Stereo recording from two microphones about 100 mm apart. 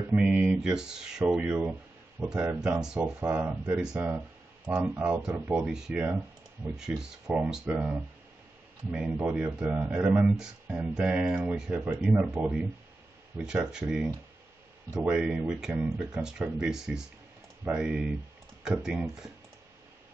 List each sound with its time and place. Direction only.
0.1 s speech: 10° right (ahead or behind)
3.3 s speech: 20° right (ahead or behind)
3.8 s speech: 5° right (ahead or behind)